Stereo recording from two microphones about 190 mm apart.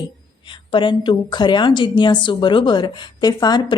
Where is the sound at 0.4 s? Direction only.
25° left (ahead or behind).